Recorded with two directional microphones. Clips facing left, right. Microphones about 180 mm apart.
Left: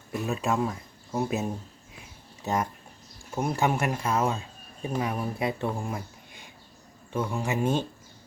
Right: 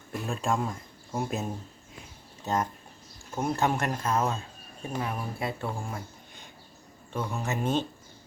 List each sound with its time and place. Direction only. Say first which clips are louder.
0.1 s speech: left 2 dB; 5° left (ahead or behind)